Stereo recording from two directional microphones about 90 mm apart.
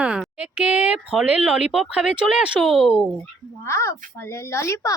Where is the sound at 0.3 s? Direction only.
15° right (ahead or behind).